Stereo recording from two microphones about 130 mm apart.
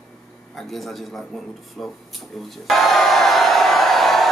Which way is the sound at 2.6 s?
Centre (ahead or behind).